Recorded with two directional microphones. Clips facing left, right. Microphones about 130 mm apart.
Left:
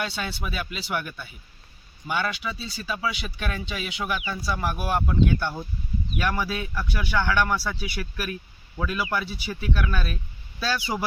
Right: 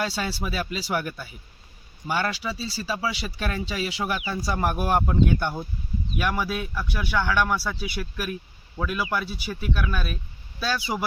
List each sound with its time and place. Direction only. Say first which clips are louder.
0.0 s speech: right 3 dB; 35° right (ahead or behind)
5.4 s a man's voice: right 1 dB; 15° right (ahead or behind)